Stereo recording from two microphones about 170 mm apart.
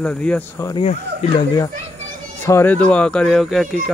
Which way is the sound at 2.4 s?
15° left (ahead or behind).